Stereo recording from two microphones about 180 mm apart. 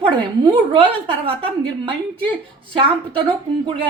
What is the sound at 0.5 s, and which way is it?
A woman's voice, 30° right (ahead or behind).